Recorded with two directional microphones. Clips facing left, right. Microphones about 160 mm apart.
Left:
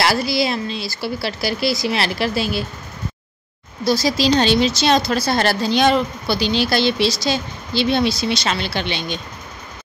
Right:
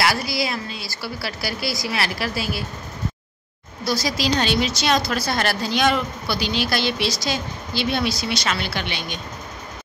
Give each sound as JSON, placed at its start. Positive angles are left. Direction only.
{"t": 0.0, "sound": "a woman's voice", "side_deg": 30}
{"t": 3.8, "sound": "a woman's voice", "side_deg": 25}